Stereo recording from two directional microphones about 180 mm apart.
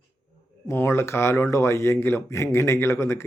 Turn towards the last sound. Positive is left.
turn(degrees=15)  # may be behind; listen again after turning